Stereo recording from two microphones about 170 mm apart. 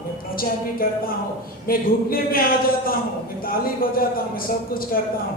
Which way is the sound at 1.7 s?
60° left (ahead or behind).